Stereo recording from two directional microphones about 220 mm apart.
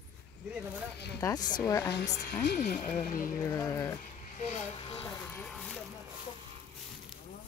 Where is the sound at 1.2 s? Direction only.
15° left (ahead or behind).